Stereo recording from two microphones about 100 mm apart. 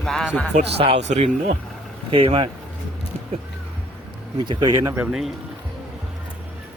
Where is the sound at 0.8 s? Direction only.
80° right.